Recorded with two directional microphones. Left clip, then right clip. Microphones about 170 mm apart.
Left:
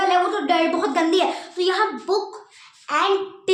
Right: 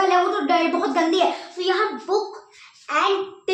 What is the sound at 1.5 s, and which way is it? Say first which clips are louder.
A child's voice: left 1 dB; 50° left (ahead or behind).